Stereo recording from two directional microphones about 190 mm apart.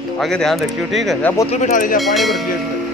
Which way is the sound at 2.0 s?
Centre (ahead or behind).